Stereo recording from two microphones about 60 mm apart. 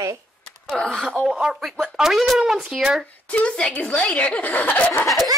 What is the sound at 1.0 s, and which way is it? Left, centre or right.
Speech, centre.